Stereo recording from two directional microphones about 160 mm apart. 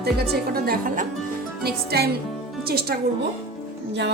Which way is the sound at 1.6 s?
80° right.